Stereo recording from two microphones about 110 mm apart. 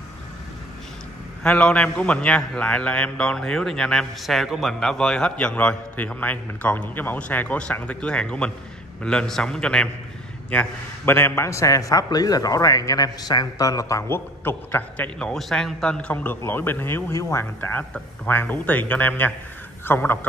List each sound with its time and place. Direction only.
1.4 s a man's voice: 10° left (ahead or behind)